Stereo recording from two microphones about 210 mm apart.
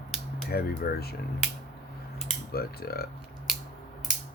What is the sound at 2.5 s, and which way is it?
Speech, 50° left (ahead or behind).